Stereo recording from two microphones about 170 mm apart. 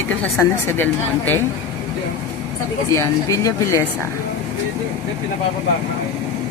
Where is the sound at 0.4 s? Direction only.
10° left (ahead or behind).